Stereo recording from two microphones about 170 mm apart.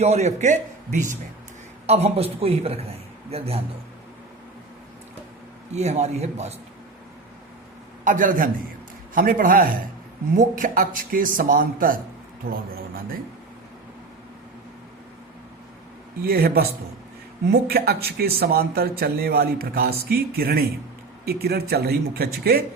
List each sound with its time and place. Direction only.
0.0 s a man's voice: 40° right (ahead or behind)
5.7 s a man's voice: 40° right (ahead or behind)
8.0 s a man's voice: 50° right (ahead or behind)
16.2 s speech: 65° right (ahead or behind)